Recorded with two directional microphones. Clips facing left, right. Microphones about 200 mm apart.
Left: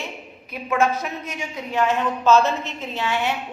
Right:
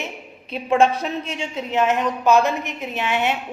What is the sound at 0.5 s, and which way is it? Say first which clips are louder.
A woman's voice: right 4 dB; 30° right (ahead or behind).